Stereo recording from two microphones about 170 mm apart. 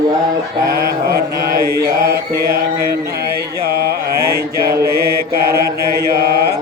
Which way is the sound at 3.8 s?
65° right (ahead or behind).